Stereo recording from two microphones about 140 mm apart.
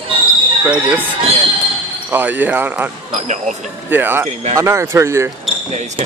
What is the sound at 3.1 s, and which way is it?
Speech, 60° right (ahead or behind).